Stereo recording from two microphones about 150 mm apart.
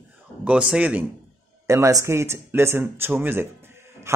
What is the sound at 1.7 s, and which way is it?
A man's voice, 20° right (ahead or behind).